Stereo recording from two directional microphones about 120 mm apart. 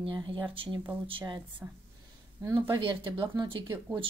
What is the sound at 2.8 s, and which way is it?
Speech, 45° right (ahead or behind).